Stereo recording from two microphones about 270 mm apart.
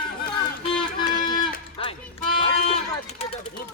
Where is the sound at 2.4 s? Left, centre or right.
Left.